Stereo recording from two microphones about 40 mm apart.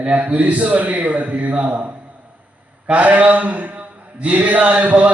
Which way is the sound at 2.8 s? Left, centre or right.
Right.